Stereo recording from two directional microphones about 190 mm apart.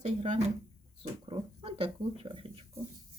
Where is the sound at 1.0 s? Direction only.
25° right (ahead or behind).